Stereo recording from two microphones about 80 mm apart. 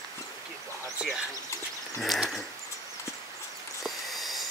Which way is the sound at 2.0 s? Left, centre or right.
Centre.